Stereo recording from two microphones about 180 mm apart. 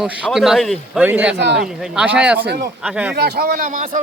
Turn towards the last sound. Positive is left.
turn(degrees=-45)  # may be behind; listen again after turning